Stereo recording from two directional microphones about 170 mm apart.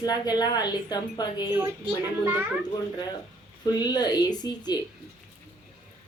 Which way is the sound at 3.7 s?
25° left (ahead or behind).